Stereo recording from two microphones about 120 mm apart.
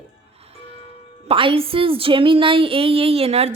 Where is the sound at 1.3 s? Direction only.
50° right (ahead or behind).